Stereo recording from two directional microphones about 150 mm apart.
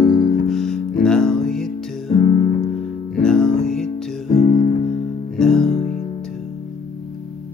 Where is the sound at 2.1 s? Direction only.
35° left (ahead or behind).